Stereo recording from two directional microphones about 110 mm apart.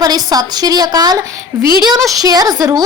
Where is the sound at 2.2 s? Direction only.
35° right (ahead or behind).